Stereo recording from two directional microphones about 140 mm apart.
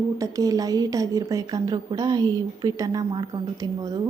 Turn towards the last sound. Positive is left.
turn(degrees=-25)  # may be behind; listen again after turning